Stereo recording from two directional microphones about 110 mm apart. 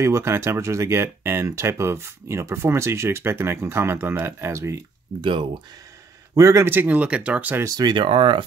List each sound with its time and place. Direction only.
0.0 s speech: 25° right (ahead or behind)
5.2 s speech: 50° right (ahead or behind)
6.3 s speech: 30° right (ahead or behind); by 7.6 s 15° right (ahead or behind)
7.6 s speech: 35° right (ahead or behind)